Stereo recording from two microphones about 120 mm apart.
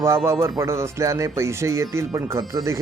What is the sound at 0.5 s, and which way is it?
Speech, 25° right (ahead or behind).